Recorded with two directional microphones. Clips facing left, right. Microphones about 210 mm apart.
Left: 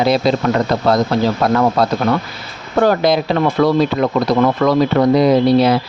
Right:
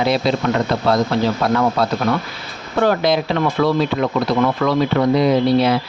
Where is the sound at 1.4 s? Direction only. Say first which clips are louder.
Left 3 dB; 40° left (ahead or behind).